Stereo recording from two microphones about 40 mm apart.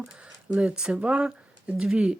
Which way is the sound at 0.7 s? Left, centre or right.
Centre.